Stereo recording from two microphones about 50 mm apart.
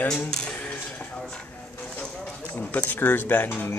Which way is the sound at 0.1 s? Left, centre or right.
Centre.